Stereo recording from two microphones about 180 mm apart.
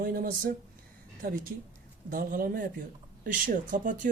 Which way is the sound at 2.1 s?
50° right (ahead or behind).